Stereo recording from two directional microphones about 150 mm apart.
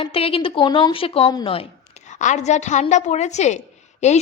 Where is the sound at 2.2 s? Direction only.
50° left (ahead or behind).